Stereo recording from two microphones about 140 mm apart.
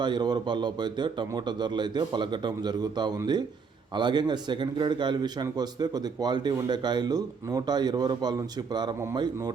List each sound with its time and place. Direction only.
0.0 s a man's voice: 30° right (ahead or behind)